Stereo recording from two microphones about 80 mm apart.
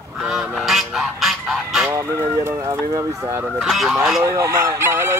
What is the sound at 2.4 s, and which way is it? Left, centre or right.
Speech, right.